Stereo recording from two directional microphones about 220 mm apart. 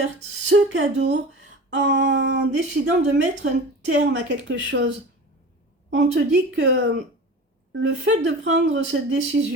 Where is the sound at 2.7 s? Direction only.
55° right (ahead or behind).